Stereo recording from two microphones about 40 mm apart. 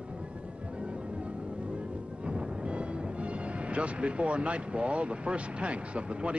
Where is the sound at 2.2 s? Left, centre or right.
Right.